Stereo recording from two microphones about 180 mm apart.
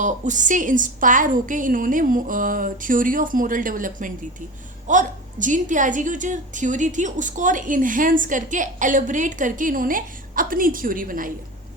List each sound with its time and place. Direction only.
0.0 s a woman's voice: 45° right (ahead or behind)